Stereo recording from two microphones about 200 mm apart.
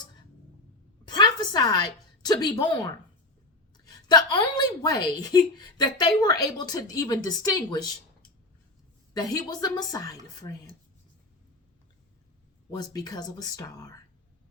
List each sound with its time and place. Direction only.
1.0 s a sound: 20° left (ahead or behind)
3.8 s a woman's voice: 20° left (ahead or behind)
9.1 s a woman's voice: 20° left (ahead or behind)
10.4 s dishes: 20° left (ahead or behind)
12.7 s a woman's voice: 20° left (ahead or behind)